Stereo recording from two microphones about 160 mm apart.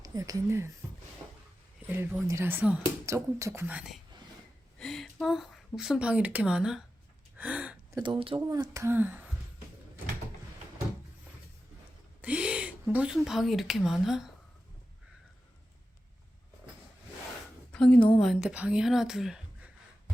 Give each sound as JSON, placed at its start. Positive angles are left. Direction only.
{"t": 0.0, "sound": "speech", "side_deg": -20}
{"t": 1.9, "sound": "speech", "side_deg": -15}
{"t": 7.3, "sound": "a sound", "side_deg": -10}
{"t": 7.9, "sound": "speech", "side_deg": -30}
{"t": 8.4, "sound": "speech", "side_deg": -20}
{"t": 12.2, "sound": "a sound", "side_deg": -10}
{"t": 12.9, "sound": "speech", "side_deg": -5}
{"t": 17.7, "sound": "a woman's voice", "side_deg": 5}